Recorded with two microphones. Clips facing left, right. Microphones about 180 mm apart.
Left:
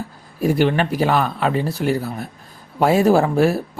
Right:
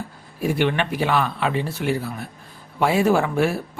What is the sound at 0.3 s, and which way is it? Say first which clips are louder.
Speech: left 4 dB; 40° left (ahead or behind).